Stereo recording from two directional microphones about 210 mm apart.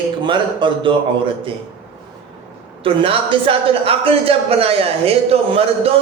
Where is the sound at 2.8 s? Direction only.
25° right (ahead or behind).